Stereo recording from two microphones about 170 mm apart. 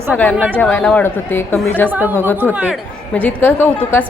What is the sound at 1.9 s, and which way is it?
Speech, 10° right (ahead or behind).